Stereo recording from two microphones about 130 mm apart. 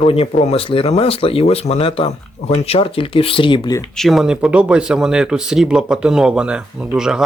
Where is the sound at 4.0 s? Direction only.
Centre (ahead or behind).